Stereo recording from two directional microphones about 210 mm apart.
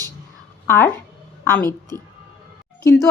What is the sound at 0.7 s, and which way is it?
Speech, 10° left (ahead or behind).